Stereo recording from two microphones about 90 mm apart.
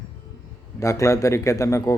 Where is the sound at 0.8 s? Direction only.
35° left (ahead or behind).